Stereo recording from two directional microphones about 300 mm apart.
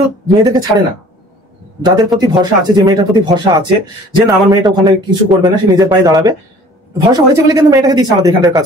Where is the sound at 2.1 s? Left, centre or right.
Centre.